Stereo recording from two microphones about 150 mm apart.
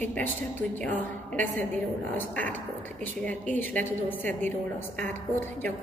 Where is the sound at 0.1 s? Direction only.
10° left (ahead or behind).